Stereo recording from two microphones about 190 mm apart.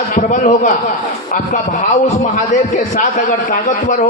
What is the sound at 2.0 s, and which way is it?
A man's voice, 40° left (ahead or behind).